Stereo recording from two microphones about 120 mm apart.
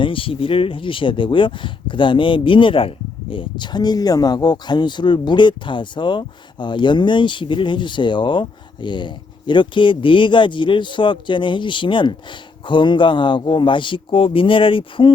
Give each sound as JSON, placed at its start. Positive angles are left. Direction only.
{"t": 0.0, "sound": "speech", "side_deg": 45}